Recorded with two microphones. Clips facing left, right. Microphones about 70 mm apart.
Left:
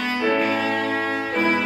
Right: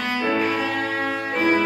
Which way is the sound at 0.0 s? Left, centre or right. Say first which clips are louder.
Left 1 dB; centre.